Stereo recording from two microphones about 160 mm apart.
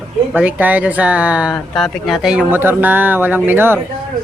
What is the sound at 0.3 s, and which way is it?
Speech, 10° right (ahead or behind).